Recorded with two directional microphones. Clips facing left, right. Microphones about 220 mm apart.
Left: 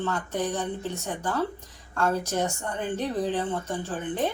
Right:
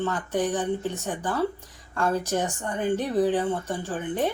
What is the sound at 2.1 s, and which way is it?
Speech, 10° left (ahead or behind).